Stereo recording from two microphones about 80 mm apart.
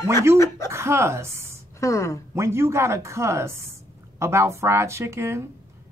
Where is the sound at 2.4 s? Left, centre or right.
Right.